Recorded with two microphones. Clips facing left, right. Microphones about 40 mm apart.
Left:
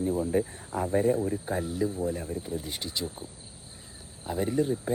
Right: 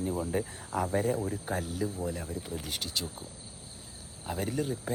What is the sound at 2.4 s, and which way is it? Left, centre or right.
Speech, right.